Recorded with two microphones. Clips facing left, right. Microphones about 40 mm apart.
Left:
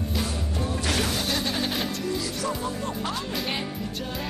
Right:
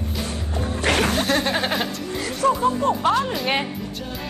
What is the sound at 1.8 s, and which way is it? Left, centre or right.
Speech, right.